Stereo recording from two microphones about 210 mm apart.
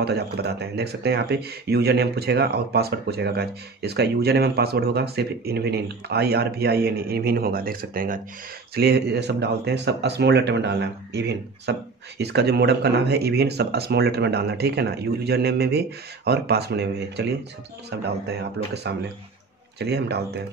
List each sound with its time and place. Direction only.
0.0 s speech: 50° right (ahead or behind)